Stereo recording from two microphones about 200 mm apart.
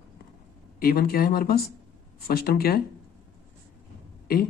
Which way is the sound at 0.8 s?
50° left (ahead or behind).